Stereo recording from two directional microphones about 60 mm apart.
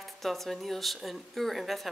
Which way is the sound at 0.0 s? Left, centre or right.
Centre.